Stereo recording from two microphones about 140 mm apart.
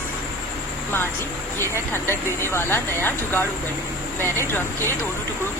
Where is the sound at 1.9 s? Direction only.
15° left (ahead or behind).